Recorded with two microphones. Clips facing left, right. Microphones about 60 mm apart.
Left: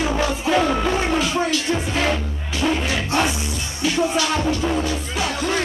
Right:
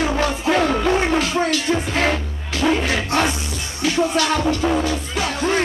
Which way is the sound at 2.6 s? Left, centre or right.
Centre.